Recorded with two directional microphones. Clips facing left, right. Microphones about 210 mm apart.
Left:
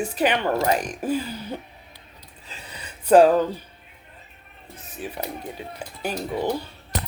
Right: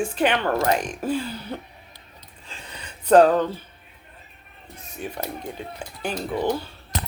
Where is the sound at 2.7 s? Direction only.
10° left (ahead or behind).